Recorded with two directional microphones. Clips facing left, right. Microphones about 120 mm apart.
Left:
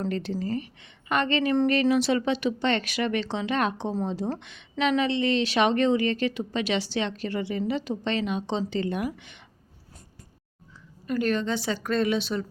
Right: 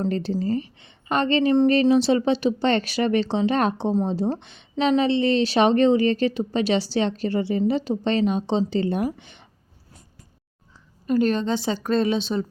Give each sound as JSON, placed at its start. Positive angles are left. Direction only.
{"t": 0.0, "sound": "a woman's voice", "side_deg": -35}
{"t": 11.0, "sound": "a woman's voice", "side_deg": -30}